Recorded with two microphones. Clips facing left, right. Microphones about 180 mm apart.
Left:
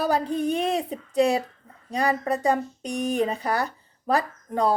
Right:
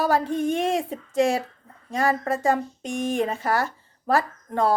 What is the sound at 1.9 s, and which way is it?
A woman's voice, 20° left (ahead or behind).